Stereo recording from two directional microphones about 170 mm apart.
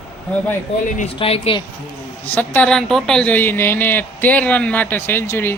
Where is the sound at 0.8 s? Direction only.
50° left (ahead or behind).